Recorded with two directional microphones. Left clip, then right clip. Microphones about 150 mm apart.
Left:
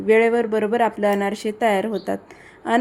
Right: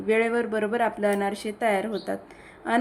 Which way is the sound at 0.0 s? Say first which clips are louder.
Left 7 dB; 25° left (ahead or behind).